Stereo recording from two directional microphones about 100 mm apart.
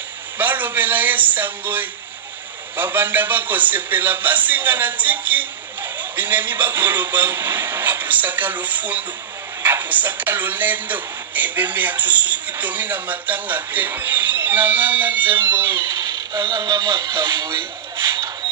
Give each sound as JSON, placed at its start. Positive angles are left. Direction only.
{"t": 0.4, "sound": "a man's voice", "side_deg": -20}
{"t": 15.8, "sound": "speech", "side_deg": -40}